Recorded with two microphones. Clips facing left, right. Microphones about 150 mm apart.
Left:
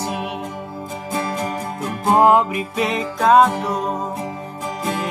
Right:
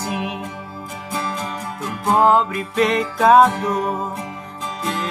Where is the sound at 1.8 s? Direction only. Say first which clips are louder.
Left 2 dB; 20° left (ahead or behind).